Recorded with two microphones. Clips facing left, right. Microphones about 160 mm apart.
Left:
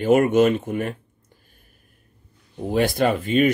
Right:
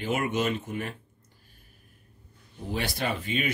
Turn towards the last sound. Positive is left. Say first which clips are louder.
# left 11 dB
turn(degrees=50)  # may be behind; listen again after turning